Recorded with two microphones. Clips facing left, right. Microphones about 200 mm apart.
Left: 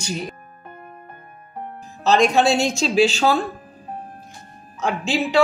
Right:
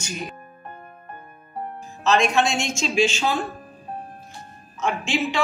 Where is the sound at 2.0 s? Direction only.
35° left (ahead or behind).